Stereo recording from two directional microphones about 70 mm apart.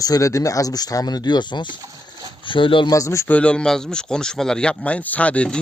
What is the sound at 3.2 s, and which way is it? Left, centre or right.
Speech, centre.